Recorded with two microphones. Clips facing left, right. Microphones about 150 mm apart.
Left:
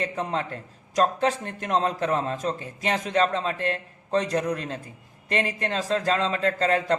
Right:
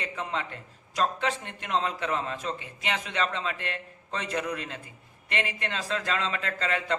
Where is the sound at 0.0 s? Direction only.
40° left (ahead or behind).